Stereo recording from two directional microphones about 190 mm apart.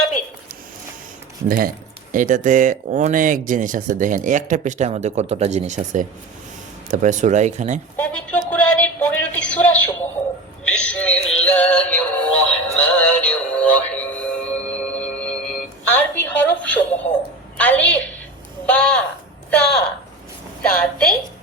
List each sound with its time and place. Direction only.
1.5 s speech: 50° right (ahead or behind)
8.0 s a sound: 5° left (ahead or behind)
10.8 s synthetic singing: 5° left (ahead or behind)
17.6 s a woman's voice: 5° left (ahead or behind)
18.6 s a sound: 5° left (ahead or behind)
20.6 s a woman's voice: 5° left (ahead or behind)